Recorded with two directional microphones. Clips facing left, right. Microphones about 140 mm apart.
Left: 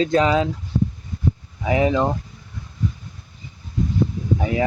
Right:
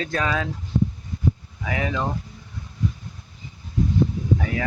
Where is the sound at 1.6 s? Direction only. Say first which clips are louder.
Left 8 dB; 25° left (ahead or behind).